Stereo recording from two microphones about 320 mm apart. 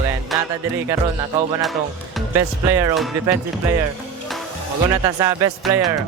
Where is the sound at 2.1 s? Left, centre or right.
Centre.